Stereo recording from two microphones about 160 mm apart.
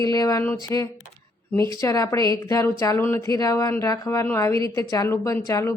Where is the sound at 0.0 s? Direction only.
20° left (ahead or behind).